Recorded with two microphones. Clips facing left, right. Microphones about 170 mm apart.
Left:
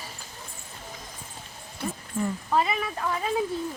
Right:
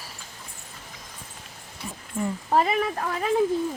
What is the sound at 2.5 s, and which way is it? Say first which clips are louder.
Speech: right 4 dB; 45° right (ahead or behind).